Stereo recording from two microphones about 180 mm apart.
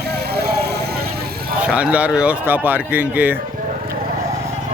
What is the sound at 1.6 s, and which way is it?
Speech, 5° right (ahead or behind).